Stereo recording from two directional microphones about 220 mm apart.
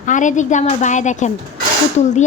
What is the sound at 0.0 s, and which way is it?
Speech, 35° left (ahead or behind).